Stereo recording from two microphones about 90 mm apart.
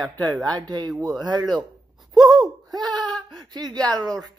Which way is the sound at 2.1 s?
50° right (ahead or behind).